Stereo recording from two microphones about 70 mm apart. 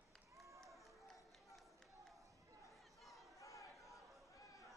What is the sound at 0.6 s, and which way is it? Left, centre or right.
Run, centre.